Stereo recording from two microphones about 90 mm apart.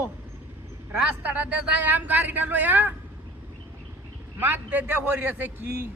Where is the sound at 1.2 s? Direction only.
20° right (ahead or behind).